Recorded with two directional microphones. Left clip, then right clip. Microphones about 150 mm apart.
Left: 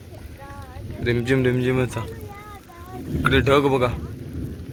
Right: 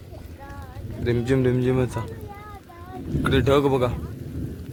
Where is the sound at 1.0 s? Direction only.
20° right (ahead or behind).